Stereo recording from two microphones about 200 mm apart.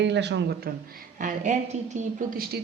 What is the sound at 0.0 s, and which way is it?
Speech, 60° right (ahead or behind).